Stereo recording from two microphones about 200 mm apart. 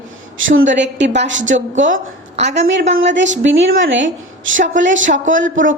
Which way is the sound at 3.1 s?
65° right (ahead or behind).